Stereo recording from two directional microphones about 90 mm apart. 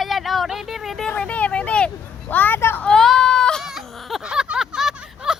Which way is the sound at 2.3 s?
20° left (ahead or behind).